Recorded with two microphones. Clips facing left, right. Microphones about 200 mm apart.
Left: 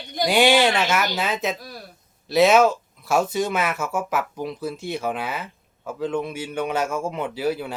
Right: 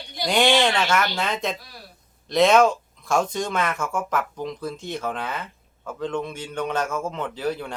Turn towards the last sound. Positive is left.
turn(degrees=10)  # may be behind; listen again after turning